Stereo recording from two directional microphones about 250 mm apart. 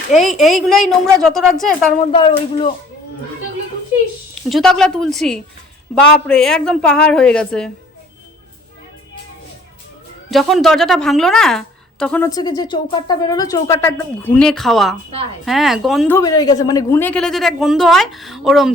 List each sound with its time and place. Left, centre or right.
0.1 s a woman's voice: centre
2.1 s speech: left
4.4 s a woman's voice: centre
10.3 s a woman's voice: centre
16.1 s a woman's voice: centre